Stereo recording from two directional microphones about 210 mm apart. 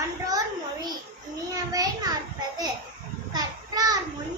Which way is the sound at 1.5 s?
15° right (ahead or behind).